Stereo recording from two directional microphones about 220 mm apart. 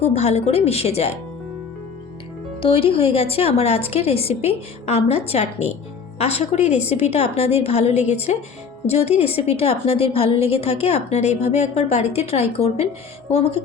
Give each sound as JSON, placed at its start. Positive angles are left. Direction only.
{"t": 0.0, "sound": "a woman's voice", "side_deg": 30}
{"t": 2.6, "sound": "a woman's voice", "side_deg": 25}